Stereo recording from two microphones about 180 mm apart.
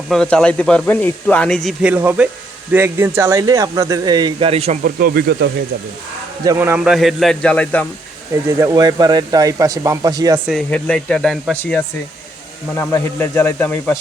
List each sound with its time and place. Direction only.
0.1 s speech: 5° left (ahead or behind); by 4.8 s 35° right (ahead or behind)
4.8 s speech: 55° right (ahead or behind)
6.4 s speech: 15° right (ahead or behind); by 7.9 s 10° left (ahead or behind)
8.4 s speech: 20° right (ahead or behind)
10.7 s speech: 5° left (ahead or behind)